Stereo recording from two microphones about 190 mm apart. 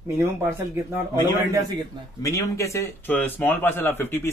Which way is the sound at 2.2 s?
15° left (ahead or behind).